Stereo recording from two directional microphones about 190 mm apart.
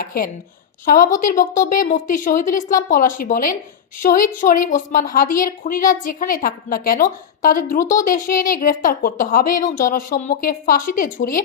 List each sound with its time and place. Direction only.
0.0 s a woman's voice: 50° left (ahead or behind)